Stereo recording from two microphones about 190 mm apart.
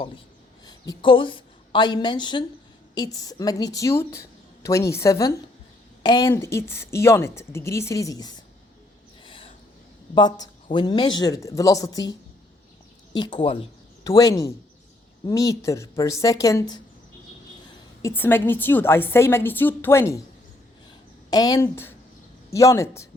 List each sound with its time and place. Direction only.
0.7 s a woman's voice: 25° left (ahead or behind)
9.2 s a sound: 25° left (ahead or behind)
10.2 s speech: 20° left (ahead or behind)
13.4 s a sound: 30° left (ahead or behind)
14.1 s a woman's voice: 15° left (ahead or behind)
18.0 s a woman's voice: 10° left (ahead or behind)
21.2 s a woman's voice: 20° left (ahead or behind)